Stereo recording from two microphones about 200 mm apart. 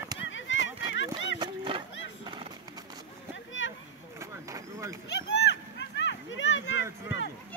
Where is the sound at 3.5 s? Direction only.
70° left (ahead or behind).